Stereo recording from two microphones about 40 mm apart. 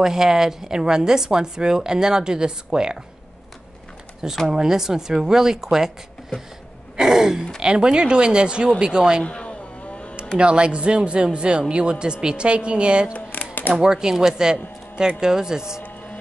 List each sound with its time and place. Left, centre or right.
0.0 s a woman's voice: centre
4.5 s a woman's voice: centre
7.0 s a woman's voice: centre
9.2 s a sound: left
10.4 s speech: right
13.1 s a sound: left
13.7 s a woman's voice: centre